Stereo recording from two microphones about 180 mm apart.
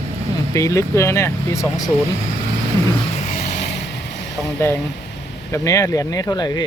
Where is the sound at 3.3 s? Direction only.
40° left (ahead or behind).